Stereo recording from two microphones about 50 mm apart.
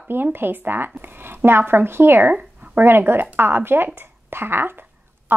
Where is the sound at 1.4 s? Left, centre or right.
Right.